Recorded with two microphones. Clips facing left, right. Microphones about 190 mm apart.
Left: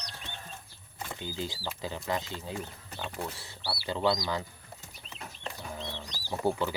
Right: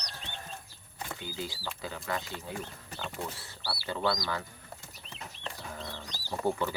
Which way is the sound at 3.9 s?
20° left (ahead or behind).